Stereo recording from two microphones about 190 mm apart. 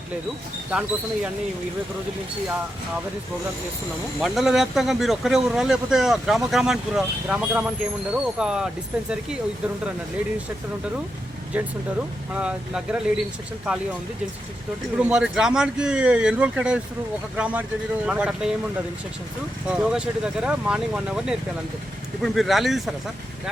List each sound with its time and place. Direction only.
0.7 s speech: 5° right (ahead or behind)
4.2 s speech: centre (ahead or behind)
11.5 s speech: 5° right (ahead or behind)
14.9 s speech: 5° right (ahead or behind)
19.6 s speech: 5° right (ahead or behind)